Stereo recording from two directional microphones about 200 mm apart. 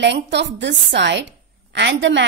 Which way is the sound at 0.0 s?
60° right (ahead or behind).